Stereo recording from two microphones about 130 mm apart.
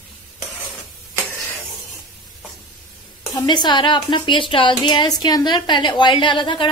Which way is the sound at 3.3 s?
35° left (ahead or behind).